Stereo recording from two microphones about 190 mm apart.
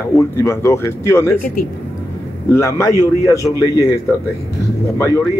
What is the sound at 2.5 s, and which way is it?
A man's voice, 15° left (ahead or behind).